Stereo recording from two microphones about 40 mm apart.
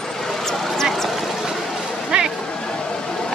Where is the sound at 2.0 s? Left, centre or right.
Centre.